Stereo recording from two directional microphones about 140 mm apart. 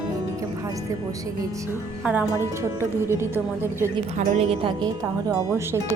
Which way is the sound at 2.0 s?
10° right (ahead or behind).